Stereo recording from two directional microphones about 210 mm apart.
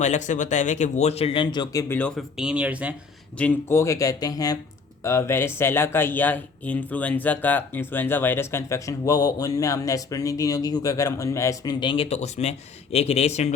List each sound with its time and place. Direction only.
0.0 s speech: 35° left (ahead or behind)
1.9 s speech: 5° left (ahead or behind)
3.3 s speech: 10° left (ahead or behind); by 13.5 s 30° left (ahead or behind)